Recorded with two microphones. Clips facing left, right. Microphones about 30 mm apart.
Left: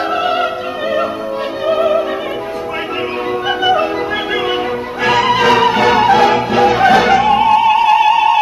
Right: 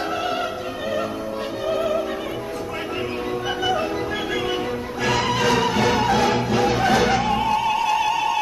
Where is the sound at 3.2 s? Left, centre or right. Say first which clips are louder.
Left 10 dB; left.